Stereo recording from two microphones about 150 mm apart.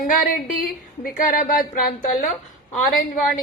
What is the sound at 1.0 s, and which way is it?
A woman's voice, 70° left (ahead or behind).